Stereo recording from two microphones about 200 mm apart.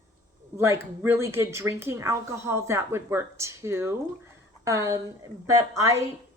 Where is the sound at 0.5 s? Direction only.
15° right (ahead or behind).